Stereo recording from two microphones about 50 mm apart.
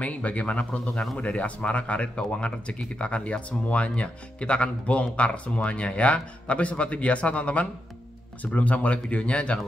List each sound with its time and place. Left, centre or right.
0.0 s speech: left